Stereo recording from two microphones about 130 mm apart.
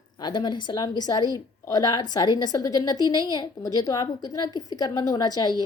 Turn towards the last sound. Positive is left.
turn(degrees=30)  # may be behind; listen again after turning